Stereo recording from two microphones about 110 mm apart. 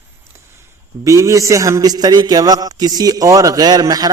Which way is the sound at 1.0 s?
30° right (ahead or behind).